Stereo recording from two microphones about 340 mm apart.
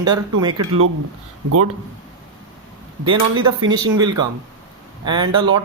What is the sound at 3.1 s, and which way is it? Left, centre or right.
A man's voice, centre.